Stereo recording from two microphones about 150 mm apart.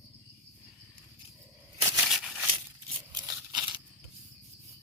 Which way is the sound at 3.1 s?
25° right (ahead or behind).